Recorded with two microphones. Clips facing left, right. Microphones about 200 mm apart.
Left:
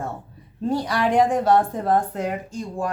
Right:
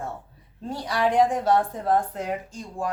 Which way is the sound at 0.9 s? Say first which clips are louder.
Even; 75° left (ahead or behind).